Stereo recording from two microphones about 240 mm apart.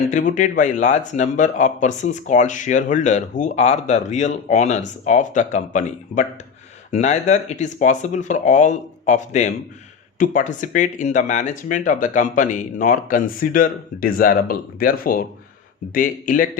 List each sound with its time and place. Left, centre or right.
0.1 s speech: left